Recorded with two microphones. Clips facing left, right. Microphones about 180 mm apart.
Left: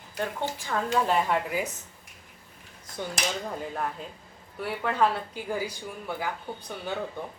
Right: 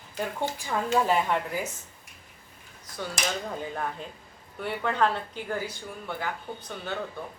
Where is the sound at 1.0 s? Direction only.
Centre (ahead or behind).